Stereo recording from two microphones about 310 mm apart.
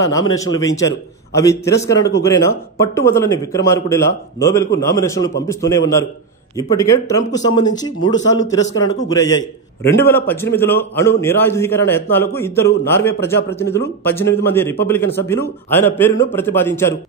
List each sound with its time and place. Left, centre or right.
0.0 s speech: centre